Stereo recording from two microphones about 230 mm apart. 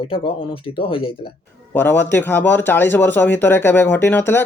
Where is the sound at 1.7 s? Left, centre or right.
Centre.